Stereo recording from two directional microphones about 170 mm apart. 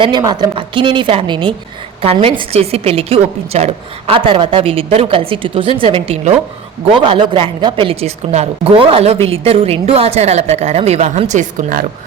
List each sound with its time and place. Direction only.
0.0 s a woman's voice: 25° right (ahead or behind); by 11.9 s 55° right (ahead or behind)